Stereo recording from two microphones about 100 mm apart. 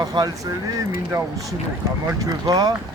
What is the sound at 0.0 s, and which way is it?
Speech, 40° right (ahead or behind).